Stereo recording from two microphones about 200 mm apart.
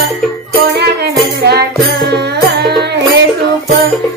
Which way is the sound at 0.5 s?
50° right (ahead or behind).